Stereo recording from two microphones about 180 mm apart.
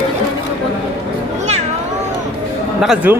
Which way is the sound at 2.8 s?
5° right (ahead or behind).